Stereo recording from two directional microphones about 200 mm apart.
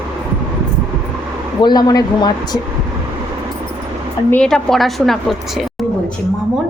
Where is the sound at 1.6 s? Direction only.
20° left (ahead or behind).